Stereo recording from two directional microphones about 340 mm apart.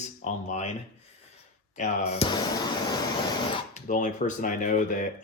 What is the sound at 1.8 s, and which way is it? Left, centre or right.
Speech, centre.